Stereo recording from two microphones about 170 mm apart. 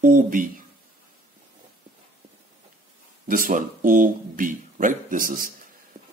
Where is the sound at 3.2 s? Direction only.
55° right (ahead or behind).